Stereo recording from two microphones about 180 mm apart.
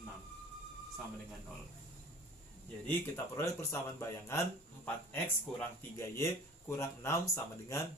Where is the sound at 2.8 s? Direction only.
15° left (ahead or behind).